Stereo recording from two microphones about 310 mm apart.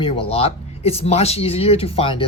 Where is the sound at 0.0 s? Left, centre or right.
Centre.